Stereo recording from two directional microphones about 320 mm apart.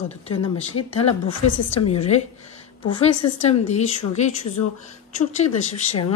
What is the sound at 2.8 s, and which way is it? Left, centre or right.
Speech, left.